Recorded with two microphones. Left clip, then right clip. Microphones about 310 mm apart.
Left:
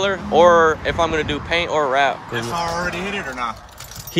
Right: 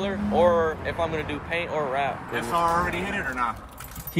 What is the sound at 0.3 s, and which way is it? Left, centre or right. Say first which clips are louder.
Speech: left 8 dB; left.